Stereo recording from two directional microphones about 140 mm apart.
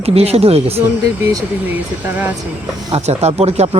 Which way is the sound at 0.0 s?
45° right (ahead or behind).